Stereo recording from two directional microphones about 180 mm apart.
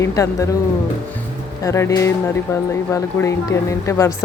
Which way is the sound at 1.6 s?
15° left (ahead or behind).